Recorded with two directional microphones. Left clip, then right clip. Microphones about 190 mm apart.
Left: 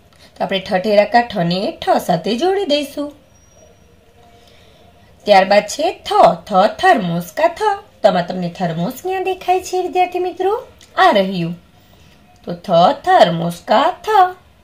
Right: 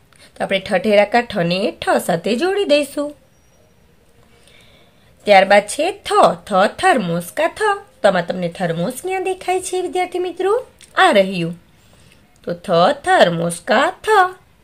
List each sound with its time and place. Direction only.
0.2 s speech: 15° right (ahead or behind)
5.2 s speech: 15° right (ahead or behind)
12.4 s speech: 20° right (ahead or behind)